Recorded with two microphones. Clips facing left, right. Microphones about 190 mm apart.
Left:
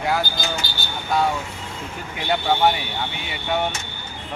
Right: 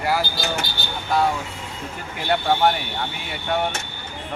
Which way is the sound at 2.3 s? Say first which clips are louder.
Even; centre (ahead or behind).